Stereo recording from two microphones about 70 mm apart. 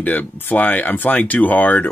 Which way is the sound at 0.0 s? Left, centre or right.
Left.